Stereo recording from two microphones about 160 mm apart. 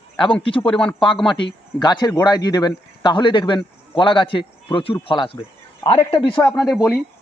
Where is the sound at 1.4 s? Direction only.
30° left (ahead or behind).